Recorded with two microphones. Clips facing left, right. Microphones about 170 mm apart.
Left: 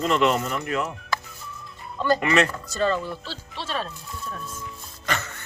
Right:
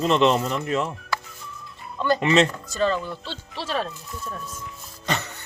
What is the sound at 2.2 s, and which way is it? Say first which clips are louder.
Speech: right 4 dB; 25° right (ahead or behind).